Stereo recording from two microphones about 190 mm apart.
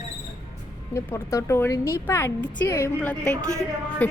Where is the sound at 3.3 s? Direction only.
40° left (ahead or behind).